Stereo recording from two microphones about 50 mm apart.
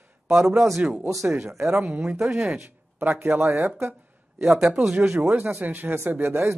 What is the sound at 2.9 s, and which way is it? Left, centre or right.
Speech, right.